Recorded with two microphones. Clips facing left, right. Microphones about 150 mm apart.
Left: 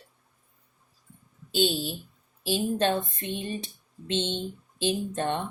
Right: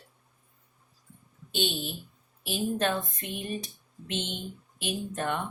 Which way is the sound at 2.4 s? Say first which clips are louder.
Left 3 dB; 30° left (ahead or behind).